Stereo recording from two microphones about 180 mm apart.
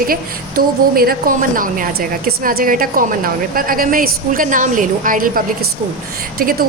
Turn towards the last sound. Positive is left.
turn(degrees=-55)  # may be behind; listen again after turning